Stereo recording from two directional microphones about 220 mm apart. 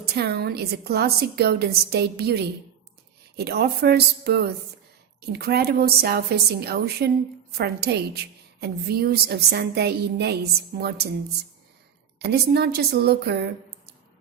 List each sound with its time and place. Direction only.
0.0 s a woman's voice: 45° right (ahead or behind)
12.2 s a woman's voice: 45° right (ahead or behind)